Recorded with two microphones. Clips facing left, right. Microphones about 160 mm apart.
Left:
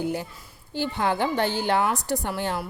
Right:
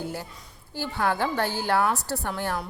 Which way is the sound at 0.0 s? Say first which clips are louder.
Left 5 dB; 15° left (ahead or behind).